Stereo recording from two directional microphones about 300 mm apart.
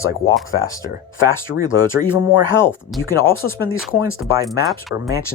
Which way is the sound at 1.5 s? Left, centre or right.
Left.